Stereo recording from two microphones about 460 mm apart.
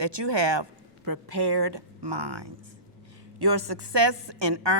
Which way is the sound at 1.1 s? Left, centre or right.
Right.